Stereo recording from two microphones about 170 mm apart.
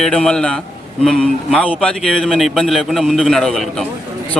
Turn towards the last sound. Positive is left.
turn(degrees=0)  # may be behind; listen again after turning